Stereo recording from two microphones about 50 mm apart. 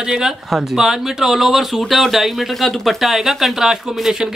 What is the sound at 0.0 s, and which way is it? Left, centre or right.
Speech, centre.